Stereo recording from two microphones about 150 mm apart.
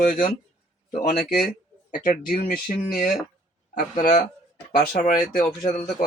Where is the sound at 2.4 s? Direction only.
60° left (ahead or behind); by 5.0 s 80° left.